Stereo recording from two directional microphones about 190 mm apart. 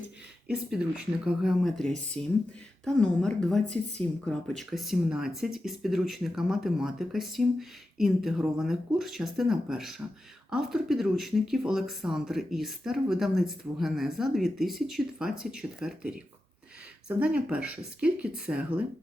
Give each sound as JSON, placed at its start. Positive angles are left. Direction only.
{"t": 0.4, "sound": "speech", "side_deg": -5}